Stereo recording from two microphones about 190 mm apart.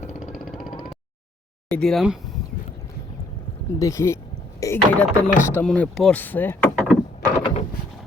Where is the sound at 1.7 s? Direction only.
5° left (ahead or behind).